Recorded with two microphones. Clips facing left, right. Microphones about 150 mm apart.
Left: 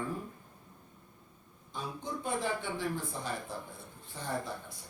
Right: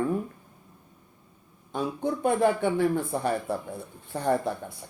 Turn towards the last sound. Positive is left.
turn(degrees=-60)  # may be behind; listen again after turning